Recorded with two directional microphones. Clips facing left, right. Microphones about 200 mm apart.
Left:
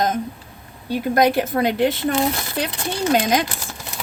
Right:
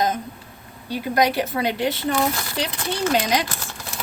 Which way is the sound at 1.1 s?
50° left (ahead or behind).